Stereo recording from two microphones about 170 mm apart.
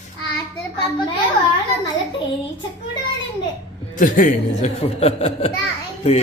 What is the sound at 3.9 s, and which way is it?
Speech, 50° left (ahead or behind).